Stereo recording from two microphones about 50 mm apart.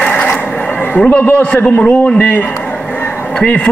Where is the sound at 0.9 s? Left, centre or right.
Left.